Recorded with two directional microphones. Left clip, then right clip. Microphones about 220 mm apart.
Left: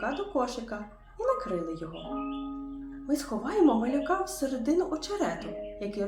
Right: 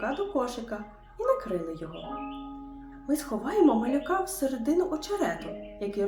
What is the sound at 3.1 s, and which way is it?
A woman's voice, 15° right (ahead or behind).